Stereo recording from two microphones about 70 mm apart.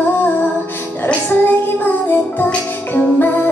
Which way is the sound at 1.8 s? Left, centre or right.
Left.